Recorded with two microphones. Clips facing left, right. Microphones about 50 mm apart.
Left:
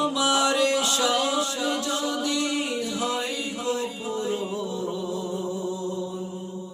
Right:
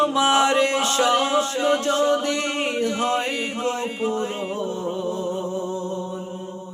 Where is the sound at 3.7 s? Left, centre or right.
Right.